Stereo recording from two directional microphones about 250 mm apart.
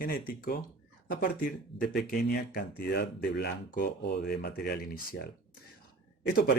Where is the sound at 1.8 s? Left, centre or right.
Left.